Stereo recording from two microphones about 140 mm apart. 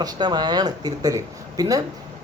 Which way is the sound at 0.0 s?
30° right (ahead or behind).